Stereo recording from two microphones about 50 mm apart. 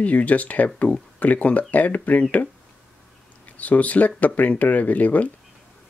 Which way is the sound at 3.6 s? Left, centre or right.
Left.